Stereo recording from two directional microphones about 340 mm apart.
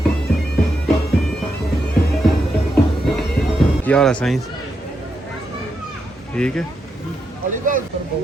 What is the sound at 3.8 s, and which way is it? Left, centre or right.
Speech, centre.